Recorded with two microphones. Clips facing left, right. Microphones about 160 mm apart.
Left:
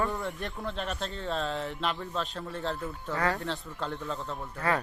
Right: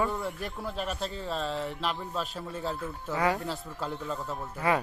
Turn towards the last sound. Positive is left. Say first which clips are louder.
# right 2 dB
turn(degrees=-10)  # may be behind; listen again after turning